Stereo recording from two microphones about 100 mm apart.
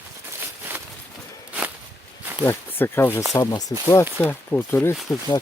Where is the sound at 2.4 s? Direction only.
25° left (ahead or behind).